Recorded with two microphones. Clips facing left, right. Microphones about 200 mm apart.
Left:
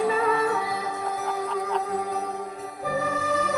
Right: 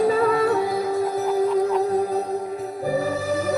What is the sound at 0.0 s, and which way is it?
Music, 35° right (ahead or behind).